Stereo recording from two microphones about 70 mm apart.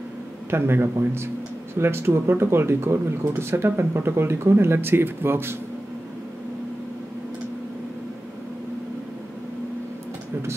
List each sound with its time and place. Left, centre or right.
0.5 s speech: right